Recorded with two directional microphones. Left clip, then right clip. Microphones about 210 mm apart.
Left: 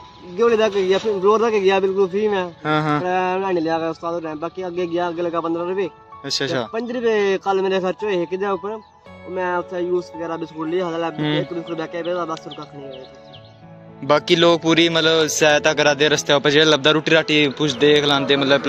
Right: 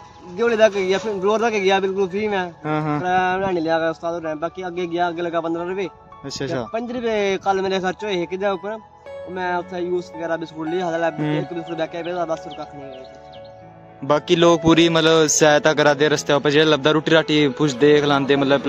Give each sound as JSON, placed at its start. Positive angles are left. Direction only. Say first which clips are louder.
{"t": 0.4, "sound": "a man's voice", "louder": "even", "side_deg": -10}
{"t": 14.0, "sound": "a man's voice", "louder": "left 1 dB", "side_deg": -15}